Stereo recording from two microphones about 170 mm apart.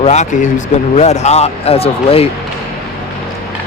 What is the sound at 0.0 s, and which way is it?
Speech, 40° left (ahead or behind).